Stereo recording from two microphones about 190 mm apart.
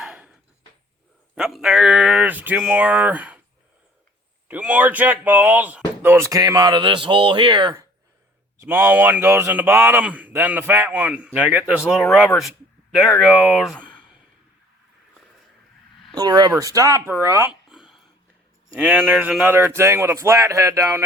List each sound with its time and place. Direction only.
0.0 s a sound: 5° right (ahead or behind)
1.4 s speech: centre (ahead or behind)
4.4 s speech: 5° right (ahead or behind)
8.6 s speech: 10° right (ahead or behind)
16.1 s speech: 20° right (ahead or behind)
17.7 s a sound: centre (ahead or behind)
18.8 s speech: 5° right (ahead or behind)